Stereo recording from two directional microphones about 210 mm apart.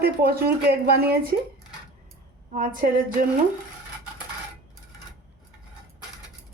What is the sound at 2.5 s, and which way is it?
Speech, 40° right (ahead or behind).